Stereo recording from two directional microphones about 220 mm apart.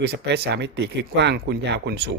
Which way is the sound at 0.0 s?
50° right (ahead or behind).